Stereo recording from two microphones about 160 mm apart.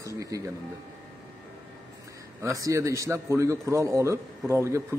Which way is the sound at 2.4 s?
20° right (ahead or behind).